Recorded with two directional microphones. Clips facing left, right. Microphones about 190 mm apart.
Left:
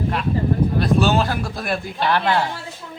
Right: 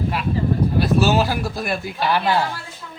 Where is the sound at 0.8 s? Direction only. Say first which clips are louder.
Right 1 dB; 5° right (ahead or behind).